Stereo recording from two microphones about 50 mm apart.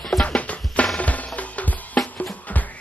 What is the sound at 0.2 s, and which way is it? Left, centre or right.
Music, left.